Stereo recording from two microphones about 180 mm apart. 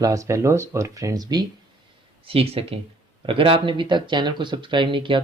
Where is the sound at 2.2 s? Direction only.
30° right (ahead or behind).